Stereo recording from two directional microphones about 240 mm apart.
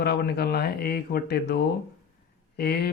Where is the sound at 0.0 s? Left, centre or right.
Left.